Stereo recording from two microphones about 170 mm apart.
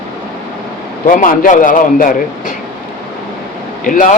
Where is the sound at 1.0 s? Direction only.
55° left (ahead or behind).